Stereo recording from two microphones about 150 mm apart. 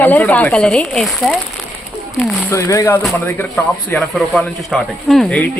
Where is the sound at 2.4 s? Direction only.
20° left (ahead or behind).